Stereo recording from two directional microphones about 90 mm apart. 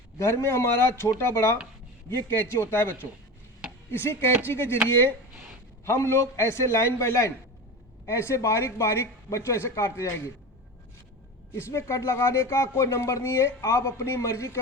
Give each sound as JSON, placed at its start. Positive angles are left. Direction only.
{"t": 0.2, "sound": "speech", "side_deg": 30}
{"t": 3.9, "sound": "speech", "side_deg": 25}
{"t": 5.8, "sound": "speech", "side_deg": 30}
{"t": 11.5, "sound": "speech", "side_deg": 30}